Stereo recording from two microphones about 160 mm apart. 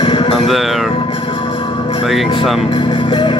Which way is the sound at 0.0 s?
30° left (ahead or behind).